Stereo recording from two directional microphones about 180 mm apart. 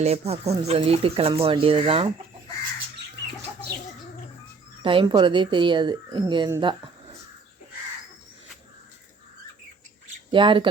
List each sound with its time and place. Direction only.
0.0 s speech: 35° right (ahead or behind)
4.8 s speech: 30° right (ahead or behind)
10.3 s speech: 30° right (ahead or behind)